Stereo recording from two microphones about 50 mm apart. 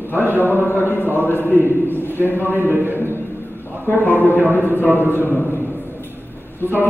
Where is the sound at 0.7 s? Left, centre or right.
Left.